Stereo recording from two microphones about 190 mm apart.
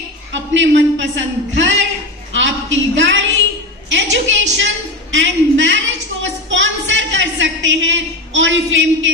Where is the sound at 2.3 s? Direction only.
75° right (ahead or behind).